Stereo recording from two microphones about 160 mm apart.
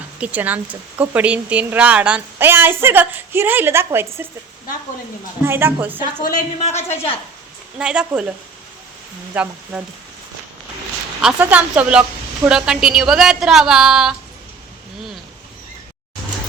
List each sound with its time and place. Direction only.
0.2 s a woman's voice: 10° right (ahead or behind)
5.5 s a woman's voice: 15° right (ahead or behind)
6.2 s speech: 45° left (ahead or behind)
7.8 s a woman's voice: 5° right (ahead or behind)
9.3 s a woman's voice: 10° right (ahead or behind)
11.2 s a woman's voice: 5° right (ahead or behind)